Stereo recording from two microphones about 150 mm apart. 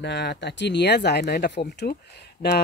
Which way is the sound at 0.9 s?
90° left.